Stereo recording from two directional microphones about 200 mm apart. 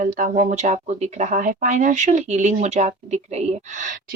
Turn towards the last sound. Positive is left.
turn(degrees=-40)  # may be behind; listen again after turning